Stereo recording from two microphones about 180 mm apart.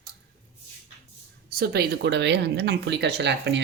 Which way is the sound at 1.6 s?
65° right (ahead or behind).